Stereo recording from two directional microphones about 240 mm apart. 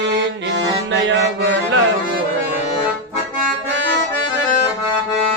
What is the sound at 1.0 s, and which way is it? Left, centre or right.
Music, right.